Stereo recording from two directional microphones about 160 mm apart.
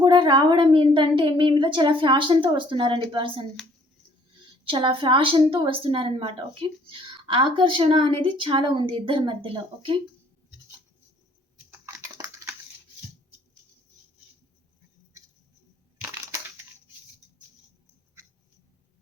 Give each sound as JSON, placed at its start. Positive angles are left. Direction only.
{"t": 0.0, "sound": "a woman's voice", "side_deg": -25}
{"t": 4.6, "sound": "a woman's voice", "side_deg": -35}
{"t": 12.1, "sound": "a sound", "side_deg": -20}